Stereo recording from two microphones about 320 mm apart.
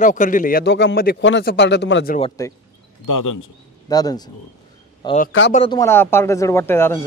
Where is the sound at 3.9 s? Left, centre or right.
Centre.